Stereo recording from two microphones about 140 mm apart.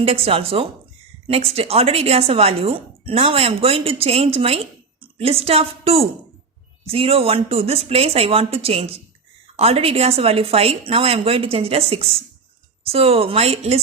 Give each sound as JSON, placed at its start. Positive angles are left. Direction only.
{"t": 0.0, "sound": "speech", "side_deg": -45}